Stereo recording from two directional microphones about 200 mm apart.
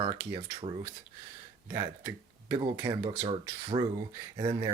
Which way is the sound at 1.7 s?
15° right (ahead or behind).